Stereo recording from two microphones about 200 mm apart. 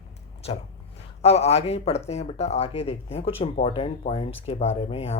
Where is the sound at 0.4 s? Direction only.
30° left (ahead or behind).